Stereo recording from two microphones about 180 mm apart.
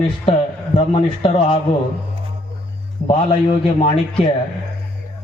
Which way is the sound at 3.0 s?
25° left (ahead or behind).